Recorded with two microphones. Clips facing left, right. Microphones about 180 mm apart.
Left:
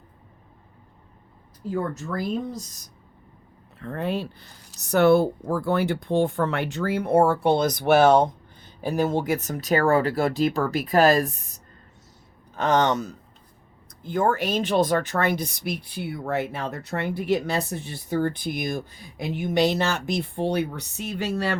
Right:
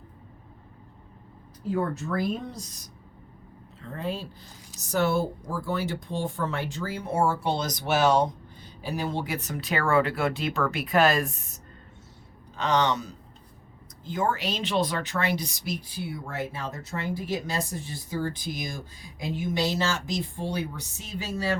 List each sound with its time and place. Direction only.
3.8 s speech: 60° left (ahead or behind); by 11.6 s 35° left (ahead or behind)
12.5 s speech: 50° left (ahead or behind)